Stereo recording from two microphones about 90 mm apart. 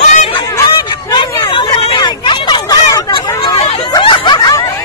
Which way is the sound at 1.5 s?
65° left (ahead or behind).